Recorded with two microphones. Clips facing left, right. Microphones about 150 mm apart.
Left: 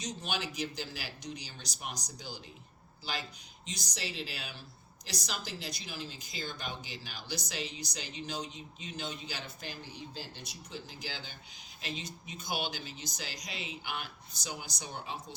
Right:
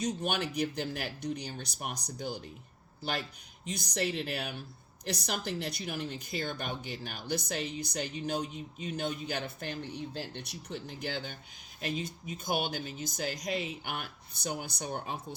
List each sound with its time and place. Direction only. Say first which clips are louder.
0.0 s a woman's voice: right 6 dB; 55° right (ahead or behind)